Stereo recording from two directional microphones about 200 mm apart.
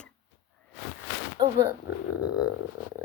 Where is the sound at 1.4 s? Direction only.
20° right (ahead or behind).